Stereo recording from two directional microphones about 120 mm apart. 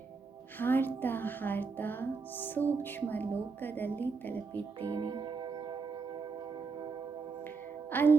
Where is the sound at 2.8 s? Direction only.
15° left (ahead or behind).